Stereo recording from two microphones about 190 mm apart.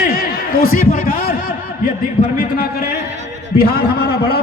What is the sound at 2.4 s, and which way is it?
A man's voice, 50° left (ahead or behind).